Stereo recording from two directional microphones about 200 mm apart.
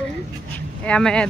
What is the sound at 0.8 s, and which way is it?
Speech, 5° left (ahead or behind).